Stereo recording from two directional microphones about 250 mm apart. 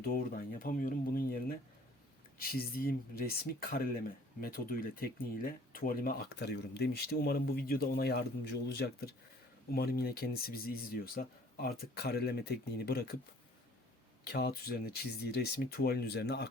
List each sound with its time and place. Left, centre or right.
0.0 s speech: left
2.4 s speech: left
14.3 s speech: left